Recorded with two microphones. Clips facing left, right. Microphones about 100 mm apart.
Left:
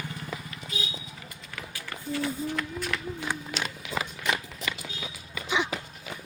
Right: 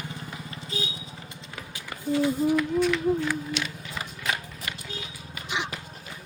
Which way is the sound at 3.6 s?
40° left (ahead or behind).